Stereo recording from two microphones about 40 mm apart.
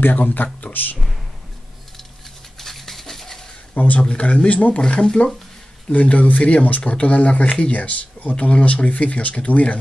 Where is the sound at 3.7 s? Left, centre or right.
Left.